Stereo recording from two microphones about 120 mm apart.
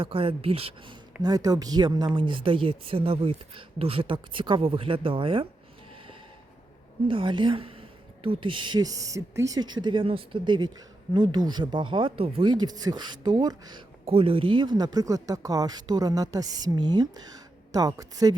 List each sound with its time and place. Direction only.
0.0 s speech: 50° right (ahead or behind)
1.2 s speech: 30° right (ahead or behind)
7.1 s speech: 45° right (ahead or behind)
14.0 s speech: 50° right (ahead or behind); by 18.3 s 30° right (ahead or behind)